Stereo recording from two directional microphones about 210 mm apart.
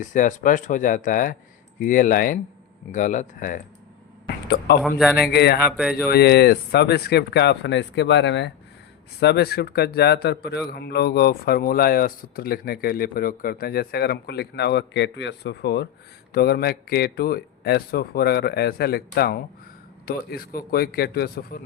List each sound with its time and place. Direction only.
0.0 s speech: 35° left (ahead or behind)
4.8 s a man's voice: centre (ahead or behind)
5.3 s speech: 50° left (ahead or behind)
5.7 s a man's voice: 5° right (ahead or behind)
6.1 s speech: 50° left (ahead or behind)